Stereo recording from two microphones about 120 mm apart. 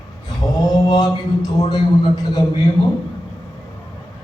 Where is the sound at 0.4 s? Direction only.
35° left (ahead or behind).